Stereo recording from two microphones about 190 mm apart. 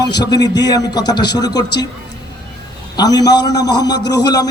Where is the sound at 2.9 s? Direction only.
20° left (ahead or behind).